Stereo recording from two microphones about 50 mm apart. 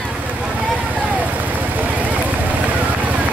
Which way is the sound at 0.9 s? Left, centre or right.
Right.